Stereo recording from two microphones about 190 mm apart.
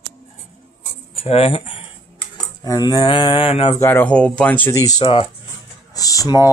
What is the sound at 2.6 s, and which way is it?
Mantra, 20° left (ahead or behind).